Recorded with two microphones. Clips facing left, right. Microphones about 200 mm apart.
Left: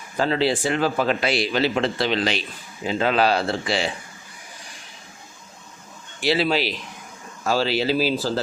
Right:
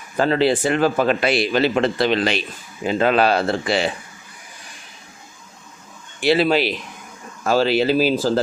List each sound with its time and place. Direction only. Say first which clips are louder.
0.2 s a man's voice: right 4 dB; 55° right (ahead or behind)
6.1 s speech: right 4 dB; 55° right (ahead or behind)